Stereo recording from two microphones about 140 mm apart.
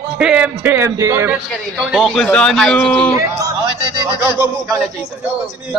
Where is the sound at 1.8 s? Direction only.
Centre (ahead or behind).